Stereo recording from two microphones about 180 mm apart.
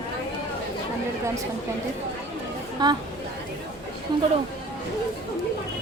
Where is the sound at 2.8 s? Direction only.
25° right (ahead or behind).